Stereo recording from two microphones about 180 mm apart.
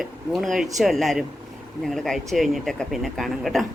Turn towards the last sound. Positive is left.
turn(degrees=0)  # may be behind; listen again after turning